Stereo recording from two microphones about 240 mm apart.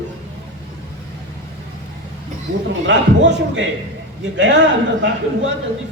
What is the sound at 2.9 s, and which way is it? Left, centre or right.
A man's voice, right.